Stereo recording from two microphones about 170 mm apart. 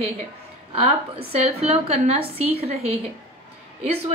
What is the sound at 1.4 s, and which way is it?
A woman's voice, 40° right (ahead or behind).